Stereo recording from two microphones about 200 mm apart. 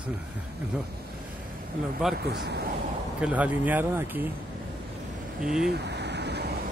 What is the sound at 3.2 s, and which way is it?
Speech, 5° right (ahead or behind).